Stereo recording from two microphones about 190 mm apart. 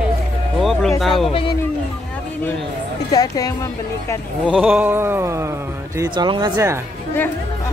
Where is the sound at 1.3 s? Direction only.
25° left (ahead or behind).